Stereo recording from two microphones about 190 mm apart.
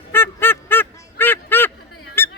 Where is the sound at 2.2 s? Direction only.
10° left (ahead or behind).